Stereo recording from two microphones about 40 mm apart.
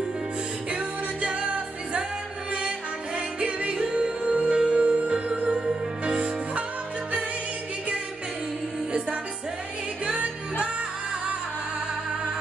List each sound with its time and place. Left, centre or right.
0.7 s music: right
3.3 s music: right
5.3 s music: centre